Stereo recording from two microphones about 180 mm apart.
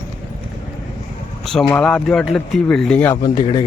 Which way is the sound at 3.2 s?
25° left (ahead or behind).